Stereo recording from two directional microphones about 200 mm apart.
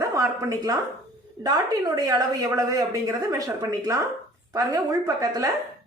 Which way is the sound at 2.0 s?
15° right (ahead or behind).